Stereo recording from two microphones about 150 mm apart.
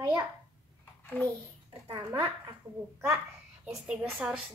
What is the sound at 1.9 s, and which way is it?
Speech, 30° right (ahead or behind).